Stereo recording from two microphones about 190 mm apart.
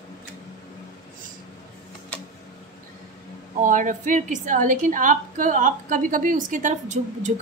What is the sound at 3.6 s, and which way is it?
A woman's voice, 45° right (ahead or behind).